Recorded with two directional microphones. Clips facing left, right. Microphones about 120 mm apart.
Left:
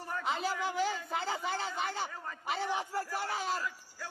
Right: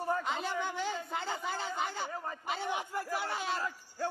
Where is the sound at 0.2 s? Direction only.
Centre (ahead or behind).